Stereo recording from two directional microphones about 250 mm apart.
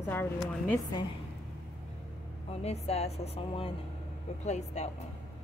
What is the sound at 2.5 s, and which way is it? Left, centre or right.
A woman's voice, left.